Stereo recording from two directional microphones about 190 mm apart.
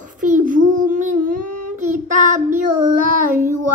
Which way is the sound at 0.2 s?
45° right (ahead or behind).